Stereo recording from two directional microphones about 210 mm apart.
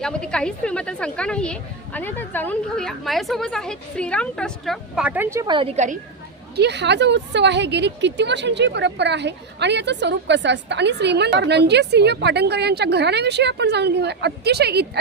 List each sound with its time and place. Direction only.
0.0 s a woman's voice: 5° left (ahead or behind); by 6.0 s 35° right (ahead or behind)
6.6 s a woman's voice: 55° right (ahead or behind)